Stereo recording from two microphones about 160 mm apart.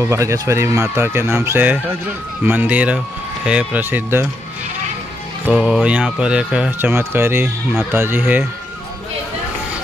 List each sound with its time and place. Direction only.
0.0 s speech: 20° right (ahead or behind)
5.5 s speech: 5° right (ahead or behind)